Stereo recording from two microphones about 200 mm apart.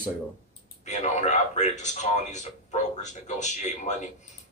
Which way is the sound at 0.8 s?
35° left (ahead or behind).